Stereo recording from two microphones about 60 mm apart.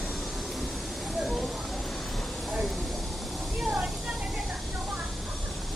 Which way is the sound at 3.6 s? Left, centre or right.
Centre.